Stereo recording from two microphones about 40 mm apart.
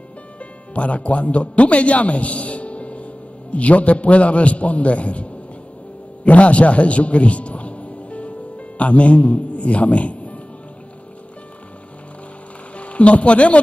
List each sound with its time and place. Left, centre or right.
0.4 s a man's voice: left
6.2 s music: left
12.7 s speech: left